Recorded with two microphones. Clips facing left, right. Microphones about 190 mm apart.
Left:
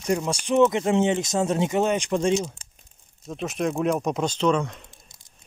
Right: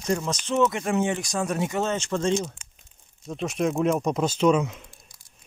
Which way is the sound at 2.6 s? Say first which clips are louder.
Left 1 dB; 35° left (ahead or behind).